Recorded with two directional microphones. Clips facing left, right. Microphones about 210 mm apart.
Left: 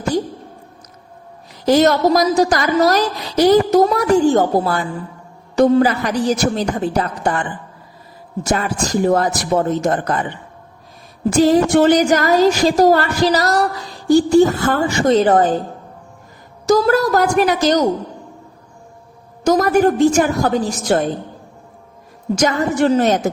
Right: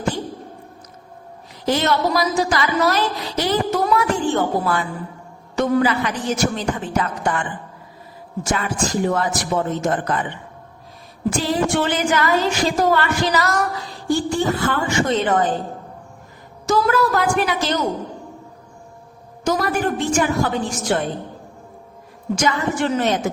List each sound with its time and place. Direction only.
1.6 s a woman's voice: 40° left (ahead or behind)
8.4 s a woman's voice: 40° left (ahead or behind)
16.6 s a woman's voice: 40° left (ahead or behind)
19.5 s a woman's voice: 45° left (ahead or behind)
22.4 s a woman's voice: 40° left (ahead or behind)